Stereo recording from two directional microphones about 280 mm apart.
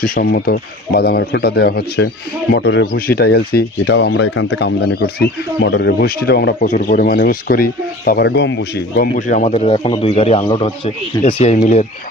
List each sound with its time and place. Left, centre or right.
0.0 s speech: left